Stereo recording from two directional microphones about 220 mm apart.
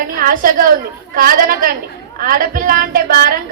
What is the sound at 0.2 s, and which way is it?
A woman's voice, 40° right (ahead or behind).